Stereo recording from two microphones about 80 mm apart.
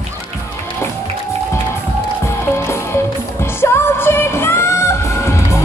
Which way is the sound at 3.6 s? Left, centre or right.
Left.